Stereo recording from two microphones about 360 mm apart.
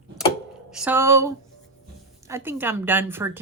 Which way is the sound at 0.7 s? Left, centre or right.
Centre.